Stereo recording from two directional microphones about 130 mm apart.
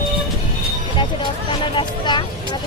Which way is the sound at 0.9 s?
40° left (ahead or behind).